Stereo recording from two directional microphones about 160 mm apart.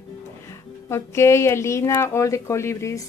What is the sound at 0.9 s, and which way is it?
Speech, 15° left (ahead or behind).